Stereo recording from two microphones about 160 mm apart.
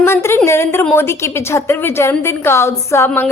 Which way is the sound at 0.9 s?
15° left (ahead or behind).